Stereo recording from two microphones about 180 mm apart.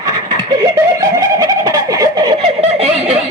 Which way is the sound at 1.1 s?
20° right (ahead or behind).